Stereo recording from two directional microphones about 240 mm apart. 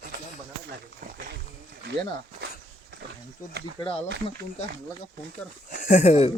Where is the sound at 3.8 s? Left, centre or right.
Left.